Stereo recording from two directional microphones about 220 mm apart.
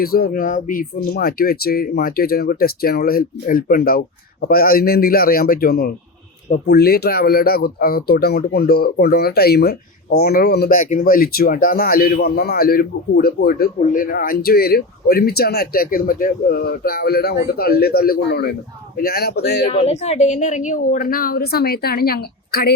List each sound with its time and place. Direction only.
0.0 s speech: 45° left (ahead or behind)
19.7 s a woman's voice: 30° left (ahead or behind); by 22.7 s 45° left (ahead or behind)